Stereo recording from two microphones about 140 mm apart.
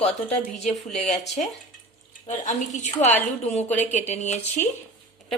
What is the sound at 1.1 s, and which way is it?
A woman's voice, 50° left (ahead or behind).